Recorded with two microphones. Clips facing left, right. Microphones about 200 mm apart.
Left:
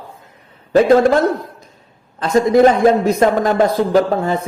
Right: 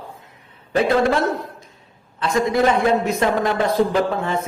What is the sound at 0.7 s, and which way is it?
Speech, 40° left (ahead or behind).